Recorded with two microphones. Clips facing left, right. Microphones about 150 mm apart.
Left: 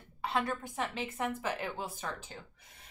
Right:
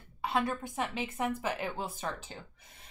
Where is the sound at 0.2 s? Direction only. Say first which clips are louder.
Right 2 dB; 10° right (ahead or behind).